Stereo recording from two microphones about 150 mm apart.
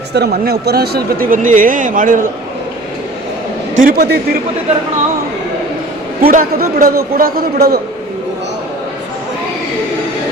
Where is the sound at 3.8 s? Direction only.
80° right.